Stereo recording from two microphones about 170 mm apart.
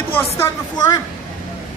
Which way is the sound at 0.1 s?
20° left (ahead or behind).